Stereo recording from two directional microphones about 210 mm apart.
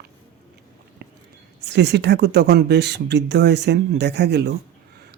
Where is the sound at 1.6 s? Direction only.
55° right (ahead or behind).